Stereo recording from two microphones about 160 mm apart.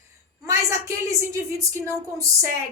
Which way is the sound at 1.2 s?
20° right (ahead or behind).